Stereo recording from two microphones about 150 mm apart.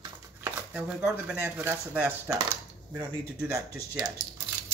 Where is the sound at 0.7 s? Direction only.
5° right (ahead or behind).